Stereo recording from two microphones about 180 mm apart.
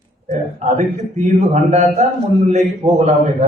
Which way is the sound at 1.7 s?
35° right (ahead or behind).